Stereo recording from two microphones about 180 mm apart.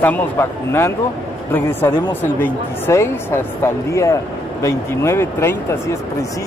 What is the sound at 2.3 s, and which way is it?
Speech, 10° left (ahead or behind).